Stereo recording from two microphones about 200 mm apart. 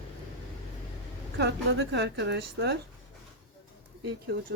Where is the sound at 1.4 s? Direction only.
60° right (ahead or behind).